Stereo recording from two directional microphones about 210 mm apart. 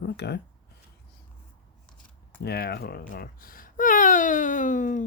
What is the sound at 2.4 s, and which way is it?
Speech, 50° left (ahead or behind).